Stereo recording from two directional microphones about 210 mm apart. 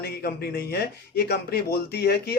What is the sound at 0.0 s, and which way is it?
Speech, 45° left (ahead or behind).